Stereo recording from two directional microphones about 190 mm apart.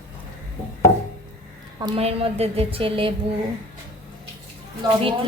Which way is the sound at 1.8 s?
30° right (ahead or behind).